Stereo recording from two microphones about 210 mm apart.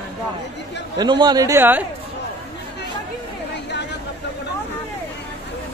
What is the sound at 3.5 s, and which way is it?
Chatter, 55° left (ahead or behind).